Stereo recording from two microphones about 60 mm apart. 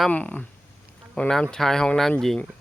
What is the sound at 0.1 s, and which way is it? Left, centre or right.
Speech, left.